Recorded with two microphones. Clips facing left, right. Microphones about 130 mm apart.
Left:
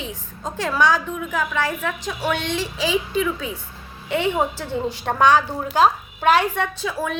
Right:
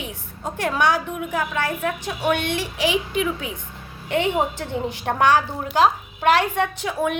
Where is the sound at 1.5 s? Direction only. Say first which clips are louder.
Even; 45° right (ahead or behind).